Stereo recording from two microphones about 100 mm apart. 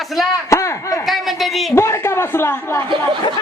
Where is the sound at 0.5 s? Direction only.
30° left (ahead or behind).